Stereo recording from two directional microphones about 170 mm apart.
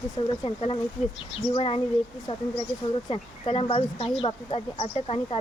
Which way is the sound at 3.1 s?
35° left (ahead or behind).